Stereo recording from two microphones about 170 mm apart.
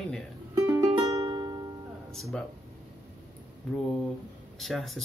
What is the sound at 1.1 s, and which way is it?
Music, 25° right (ahead or behind).